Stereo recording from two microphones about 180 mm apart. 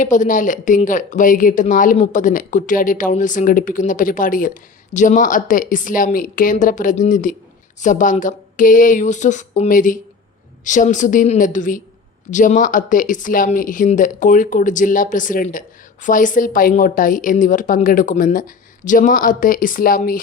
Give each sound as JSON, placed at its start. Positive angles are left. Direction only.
{"t": 0.0, "sound": "speech", "side_deg": 45}